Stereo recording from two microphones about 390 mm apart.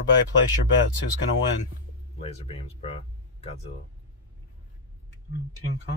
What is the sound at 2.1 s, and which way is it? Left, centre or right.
Speech, centre.